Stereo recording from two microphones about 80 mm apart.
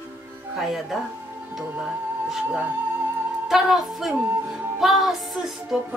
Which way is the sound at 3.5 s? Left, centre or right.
Centre.